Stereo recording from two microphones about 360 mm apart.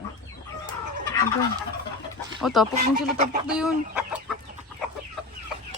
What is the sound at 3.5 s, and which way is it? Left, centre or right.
Speech, centre.